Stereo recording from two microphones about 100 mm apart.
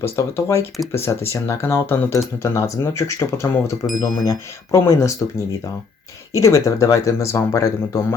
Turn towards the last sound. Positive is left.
turn(degrees=30)  # may be behind; listen again after turning